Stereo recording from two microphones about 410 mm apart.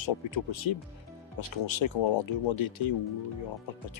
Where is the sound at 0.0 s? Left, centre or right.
Left.